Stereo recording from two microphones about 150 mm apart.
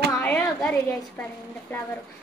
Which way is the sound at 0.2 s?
10° left (ahead or behind).